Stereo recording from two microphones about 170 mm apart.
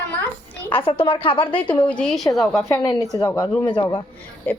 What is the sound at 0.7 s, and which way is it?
Speech, 30° left (ahead or behind).